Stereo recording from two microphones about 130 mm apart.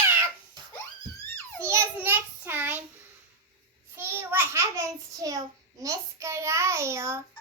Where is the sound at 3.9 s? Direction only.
15° right (ahead or behind).